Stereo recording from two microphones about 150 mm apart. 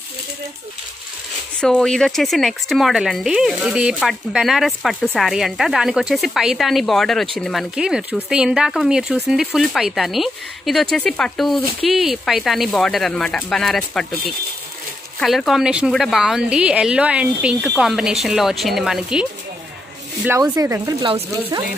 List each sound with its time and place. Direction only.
1.6 s speech: 5° left (ahead or behind)
15.1 s speech: centre (ahead or behind)
20.2 s speech: 20° right (ahead or behind)
21.0 s speech: 30° right (ahead or behind)